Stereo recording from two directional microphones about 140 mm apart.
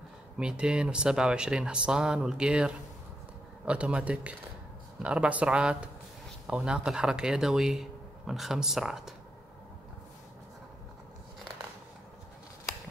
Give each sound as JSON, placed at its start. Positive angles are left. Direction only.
{"t": 0.4, "sound": "speech", "side_deg": -5}